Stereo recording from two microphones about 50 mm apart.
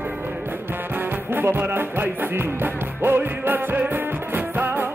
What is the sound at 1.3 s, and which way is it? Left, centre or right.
Music, right.